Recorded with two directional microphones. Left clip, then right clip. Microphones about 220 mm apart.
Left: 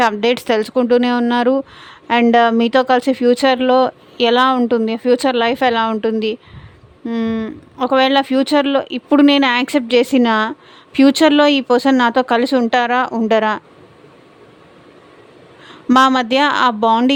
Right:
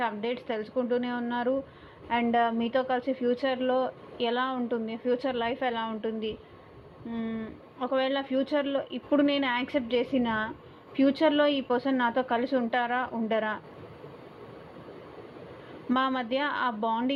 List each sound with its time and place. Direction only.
0.0 s speech: 65° left (ahead or behind)
7.1 s speech: 75° left (ahead or behind)
15.9 s speech: 65° left (ahead or behind)